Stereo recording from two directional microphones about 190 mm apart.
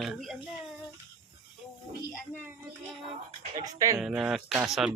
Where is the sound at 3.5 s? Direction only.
20° right (ahead or behind).